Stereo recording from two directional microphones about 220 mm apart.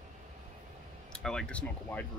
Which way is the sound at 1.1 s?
5° left (ahead or behind).